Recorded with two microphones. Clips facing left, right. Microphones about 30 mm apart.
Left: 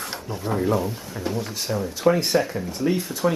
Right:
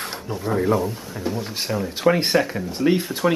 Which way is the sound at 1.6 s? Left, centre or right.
Centre.